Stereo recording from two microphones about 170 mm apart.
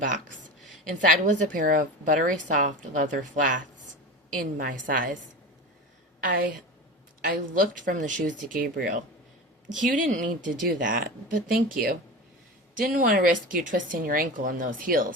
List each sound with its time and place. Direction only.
0.9 s a woman's voice: 50° right (ahead or behind)
6.1 s a woman's voice: 55° right (ahead or behind)